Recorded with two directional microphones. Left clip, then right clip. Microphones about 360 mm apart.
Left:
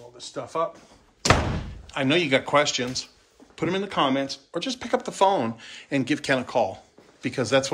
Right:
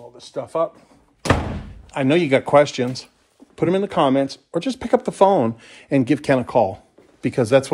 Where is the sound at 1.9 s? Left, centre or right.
Centre.